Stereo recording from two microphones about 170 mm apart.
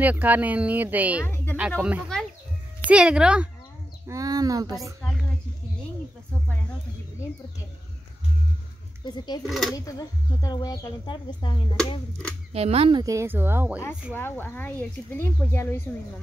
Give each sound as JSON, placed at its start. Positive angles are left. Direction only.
{"t": 0.0, "sound": "speech", "side_deg": -10}
{"t": 1.2, "sound": "speech", "side_deg": 15}
{"t": 1.8, "sound": "speech", "side_deg": -10}
{"t": 4.1, "sound": "speech", "side_deg": -20}
{"t": 9.0, "sound": "speech", "side_deg": 25}
{"t": 9.5, "sound": "speech", "side_deg": 0}
{"t": 9.8, "sound": "speech", "side_deg": 20}
{"t": 12.5, "sound": "speech", "side_deg": -35}
{"t": 13.0, "sound": "speech", "side_deg": -15}
{"t": 14.1, "sound": "speech", "side_deg": 10}